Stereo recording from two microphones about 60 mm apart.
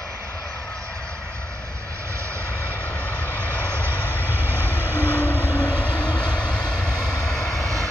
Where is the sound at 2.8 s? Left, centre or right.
Left.